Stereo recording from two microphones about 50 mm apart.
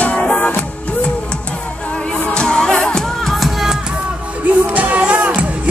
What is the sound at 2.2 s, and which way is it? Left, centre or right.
Music, centre.